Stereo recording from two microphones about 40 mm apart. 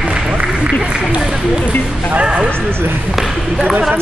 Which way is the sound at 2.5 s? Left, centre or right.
Right.